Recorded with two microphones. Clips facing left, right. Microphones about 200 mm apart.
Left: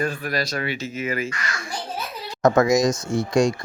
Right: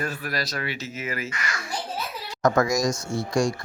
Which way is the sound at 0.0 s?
5° right (ahead or behind).